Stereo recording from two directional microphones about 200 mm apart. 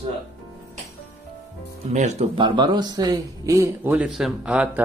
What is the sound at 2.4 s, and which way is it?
A man's voice, 20° right (ahead or behind).